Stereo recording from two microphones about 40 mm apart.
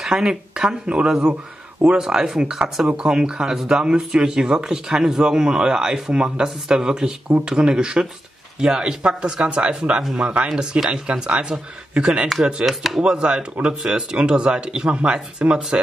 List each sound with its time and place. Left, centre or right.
0.0 s speech: centre
12.6 s chopping: centre
13.0 s speech: right